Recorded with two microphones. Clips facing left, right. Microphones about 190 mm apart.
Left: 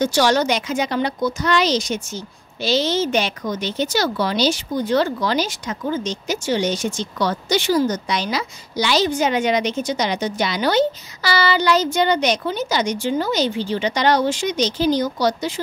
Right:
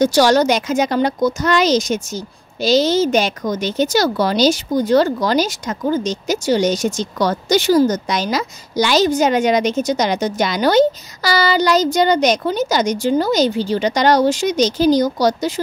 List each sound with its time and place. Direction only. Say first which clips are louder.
0.0 s a woman's voice: right 5 dB; 40° right (ahead or behind)